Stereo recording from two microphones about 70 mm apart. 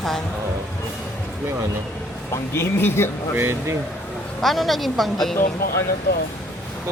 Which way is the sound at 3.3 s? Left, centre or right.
Right.